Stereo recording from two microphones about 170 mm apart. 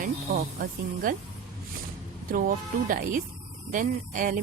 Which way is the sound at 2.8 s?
50° right (ahead or behind).